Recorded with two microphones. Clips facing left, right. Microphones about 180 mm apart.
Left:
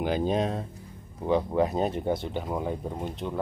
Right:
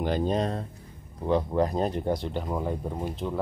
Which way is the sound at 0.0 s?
Centre (ahead or behind).